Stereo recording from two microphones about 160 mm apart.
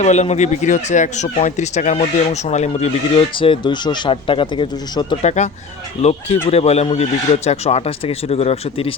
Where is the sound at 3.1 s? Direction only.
30° left (ahead or behind).